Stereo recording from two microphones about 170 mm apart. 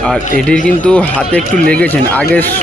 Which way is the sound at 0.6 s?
5° left (ahead or behind).